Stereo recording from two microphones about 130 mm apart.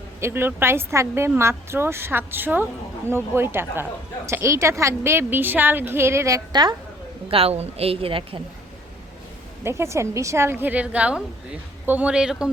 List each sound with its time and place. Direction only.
0.2 s a woman's voice: 20° right (ahead or behind); by 6.7 s 35° right (ahead or behind)
7.3 s a woman's voice: 50° right (ahead or behind)
9.6 s a woman's voice: 20° right (ahead or behind); by 12.5 s 5° right (ahead or behind)